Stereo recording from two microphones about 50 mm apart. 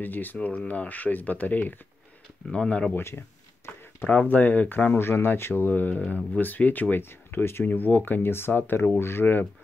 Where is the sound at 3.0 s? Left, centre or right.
Left.